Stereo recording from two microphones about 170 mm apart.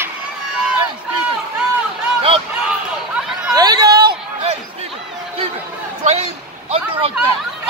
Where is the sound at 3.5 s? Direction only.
20° right (ahead or behind).